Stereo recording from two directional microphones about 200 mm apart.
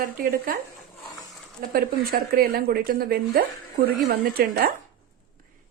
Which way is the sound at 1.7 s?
50° right (ahead or behind).